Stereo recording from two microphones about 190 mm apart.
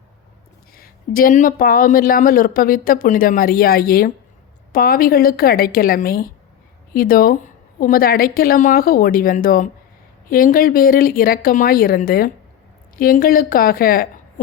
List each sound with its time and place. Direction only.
0.8 s a woman's voice: 50° left (ahead or behind)